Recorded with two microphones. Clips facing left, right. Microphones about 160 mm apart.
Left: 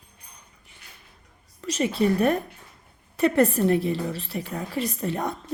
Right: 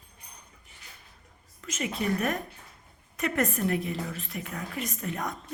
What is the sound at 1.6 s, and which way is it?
A woman's voice, 35° left (ahead or behind).